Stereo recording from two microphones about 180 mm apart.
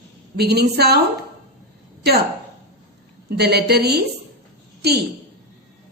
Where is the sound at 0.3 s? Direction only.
65° right (ahead or behind).